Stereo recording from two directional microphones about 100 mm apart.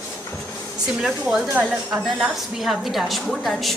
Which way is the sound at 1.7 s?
20° right (ahead or behind).